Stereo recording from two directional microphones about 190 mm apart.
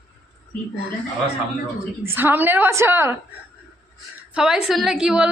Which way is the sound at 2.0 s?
10° right (ahead or behind).